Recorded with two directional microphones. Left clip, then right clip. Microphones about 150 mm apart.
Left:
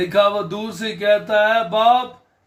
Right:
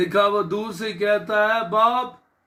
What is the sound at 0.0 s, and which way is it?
A man's voice, 20° left (ahead or behind).